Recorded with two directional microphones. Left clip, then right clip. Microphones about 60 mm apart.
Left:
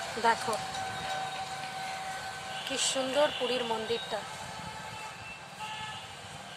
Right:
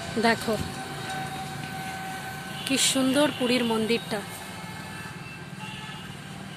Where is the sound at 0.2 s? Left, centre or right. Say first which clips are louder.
Right 4 dB; right.